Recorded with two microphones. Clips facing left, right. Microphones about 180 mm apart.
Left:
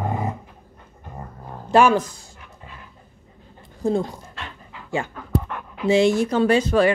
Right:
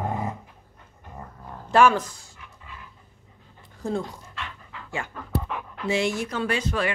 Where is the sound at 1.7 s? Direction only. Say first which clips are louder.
Left 3 dB; 15° left (ahead or behind).